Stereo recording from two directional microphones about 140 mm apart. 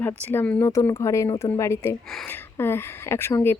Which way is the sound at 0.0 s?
15° left (ahead or behind).